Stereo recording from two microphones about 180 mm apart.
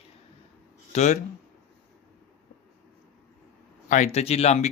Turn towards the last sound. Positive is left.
turn(degrees=35)  # may be behind; listen again after turning